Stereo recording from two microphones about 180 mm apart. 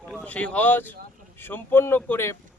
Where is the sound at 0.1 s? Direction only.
5° left (ahead or behind).